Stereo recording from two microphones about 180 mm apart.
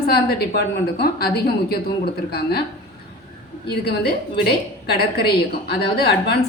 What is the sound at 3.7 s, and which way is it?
A woman's voice, 65° left (ahead or behind).